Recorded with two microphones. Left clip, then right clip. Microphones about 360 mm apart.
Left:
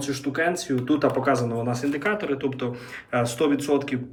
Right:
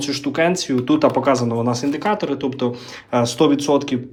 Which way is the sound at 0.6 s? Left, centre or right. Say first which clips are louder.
Right 6 dB; centre.